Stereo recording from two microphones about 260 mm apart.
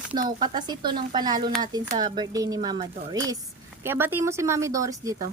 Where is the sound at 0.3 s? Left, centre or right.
Centre.